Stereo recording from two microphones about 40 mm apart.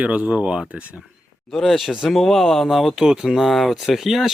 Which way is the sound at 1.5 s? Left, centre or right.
Centre.